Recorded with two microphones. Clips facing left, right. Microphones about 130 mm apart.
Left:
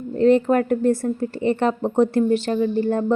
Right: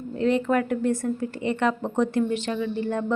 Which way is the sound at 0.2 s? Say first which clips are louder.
Left 6 dB; 40° left (ahead or behind).